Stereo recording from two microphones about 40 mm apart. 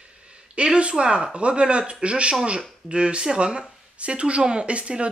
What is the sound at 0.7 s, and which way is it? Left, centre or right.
A woman's voice, right.